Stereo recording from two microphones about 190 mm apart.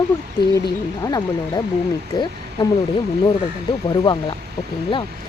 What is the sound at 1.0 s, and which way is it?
Speech, 20° left (ahead or behind).